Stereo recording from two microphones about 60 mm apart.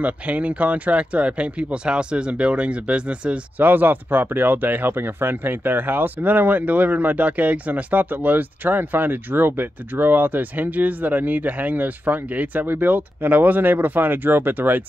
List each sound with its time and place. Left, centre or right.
0.0 s speech: right
3.5 s speech: right